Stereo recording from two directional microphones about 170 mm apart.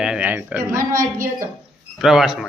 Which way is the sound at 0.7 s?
55° right (ahead or behind).